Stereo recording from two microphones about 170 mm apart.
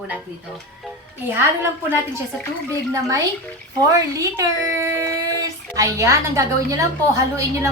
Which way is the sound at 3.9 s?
20° right (ahead or behind).